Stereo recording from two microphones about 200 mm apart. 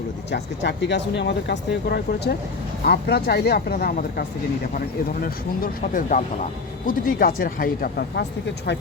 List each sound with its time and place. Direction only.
0.3 s speech: 55° left (ahead or behind)